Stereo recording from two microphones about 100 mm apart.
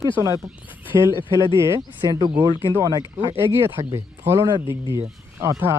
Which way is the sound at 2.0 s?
45° right (ahead or behind).